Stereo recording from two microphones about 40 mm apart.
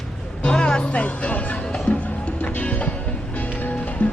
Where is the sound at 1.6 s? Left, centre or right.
Left.